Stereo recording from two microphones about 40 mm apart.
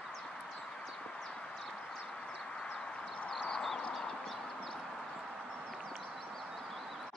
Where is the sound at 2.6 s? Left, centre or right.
Centre.